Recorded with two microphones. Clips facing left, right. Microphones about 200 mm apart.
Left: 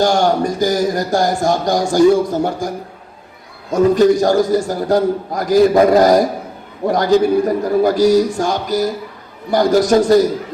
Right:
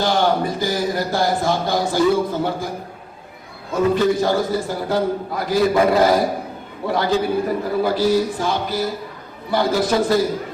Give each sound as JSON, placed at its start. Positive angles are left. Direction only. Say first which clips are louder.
{"t": 0.0, "sound": "a man's voice", "louder": "left 4 dB", "side_deg": 45}
{"t": 3.7, "sound": "a man's voice", "louder": "left 6 dB", "side_deg": 45}